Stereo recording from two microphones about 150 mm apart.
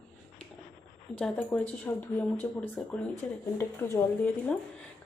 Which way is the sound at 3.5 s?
15° left (ahead or behind).